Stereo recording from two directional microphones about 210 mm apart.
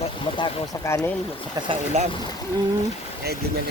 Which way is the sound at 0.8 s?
10° left (ahead or behind).